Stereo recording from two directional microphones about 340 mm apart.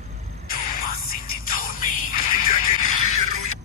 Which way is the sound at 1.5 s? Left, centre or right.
Left.